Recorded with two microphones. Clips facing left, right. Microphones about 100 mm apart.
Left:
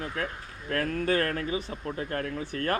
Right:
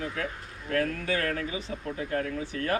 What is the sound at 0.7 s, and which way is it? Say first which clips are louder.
Speech: left 1 dB; 40° left (ahead or behind).